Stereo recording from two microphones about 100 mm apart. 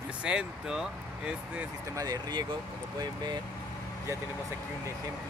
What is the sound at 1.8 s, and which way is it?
Speech, 35° right (ahead or behind).